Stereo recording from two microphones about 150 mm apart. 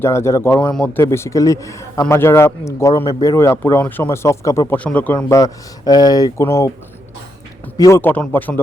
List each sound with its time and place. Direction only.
0.0 s a man's voice: 20° left (ahead or behind)
5.3 s a man's voice: 25° left (ahead or behind)
7.8 s speech: 20° left (ahead or behind)